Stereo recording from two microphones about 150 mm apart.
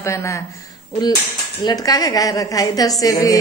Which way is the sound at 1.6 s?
25° left (ahead or behind).